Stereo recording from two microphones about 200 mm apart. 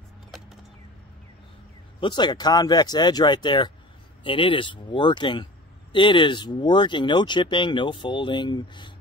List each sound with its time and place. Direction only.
2.0 s speech: 20° left (ahead or behind)